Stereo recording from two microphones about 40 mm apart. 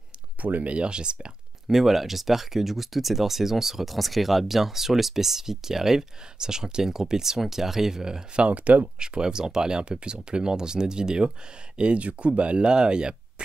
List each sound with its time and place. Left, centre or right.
0.4 s speech: right
1.7 s speech: centre
8.5 s speech: right
9.0 s speech: centre